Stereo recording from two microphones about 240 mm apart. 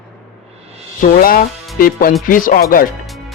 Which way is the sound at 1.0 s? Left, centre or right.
Left.